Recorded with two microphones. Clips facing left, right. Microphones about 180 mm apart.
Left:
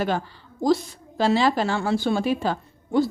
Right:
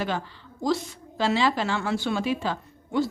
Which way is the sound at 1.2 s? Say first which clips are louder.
Left 3 dB; 40° left (ahead or behind).